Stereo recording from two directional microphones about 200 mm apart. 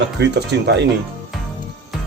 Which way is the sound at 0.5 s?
60° right (ahead or behind).